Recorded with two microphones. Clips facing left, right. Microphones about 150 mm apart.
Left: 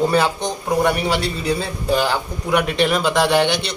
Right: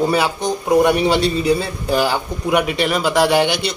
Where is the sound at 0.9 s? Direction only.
20° right (ahead or behind).